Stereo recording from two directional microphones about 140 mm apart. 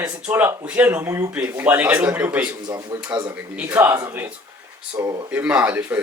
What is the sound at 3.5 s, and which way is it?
A child's voice, 15° right (ahead or behind).